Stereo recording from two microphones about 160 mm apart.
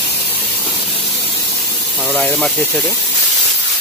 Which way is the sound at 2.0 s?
10° left (ahead or behind).